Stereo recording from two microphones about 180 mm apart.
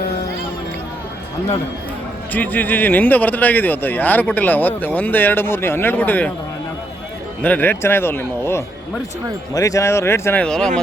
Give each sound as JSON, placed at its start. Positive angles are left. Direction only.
{"t": 2.3, "sound": "speech", "side_deg": 10}
{"t": 7.4, "sound": "speech", "side_deg": 10}